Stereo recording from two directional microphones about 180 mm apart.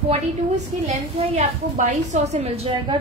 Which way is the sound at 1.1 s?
35° right (ahead or behind).